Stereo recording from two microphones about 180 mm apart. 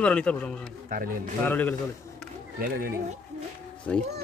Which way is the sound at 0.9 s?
50° right (ahead or behind).